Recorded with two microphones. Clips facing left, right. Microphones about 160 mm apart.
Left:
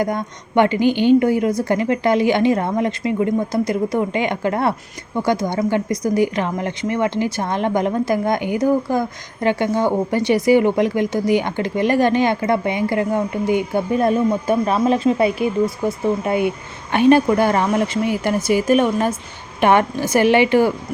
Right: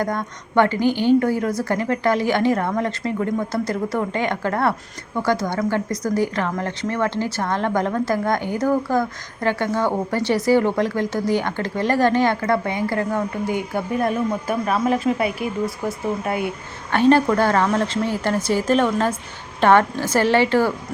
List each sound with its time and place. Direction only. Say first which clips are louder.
0.0 s a woman's voice: left 3 dB; 20° left (ahead or behind)